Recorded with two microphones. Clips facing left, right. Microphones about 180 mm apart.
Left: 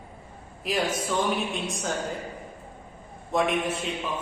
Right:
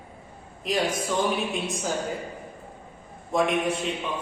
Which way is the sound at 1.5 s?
Centre (ahead or behind).